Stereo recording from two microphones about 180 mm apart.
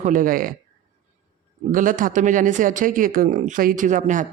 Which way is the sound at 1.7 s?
50° right (ahead or behind).